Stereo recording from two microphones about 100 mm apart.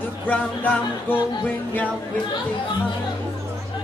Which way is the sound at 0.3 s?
15° left (ahead or behind).